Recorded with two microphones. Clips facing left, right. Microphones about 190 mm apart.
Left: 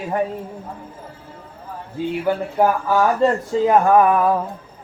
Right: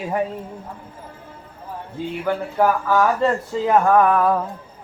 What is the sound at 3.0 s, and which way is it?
Speech, 20° left (ahead or behind).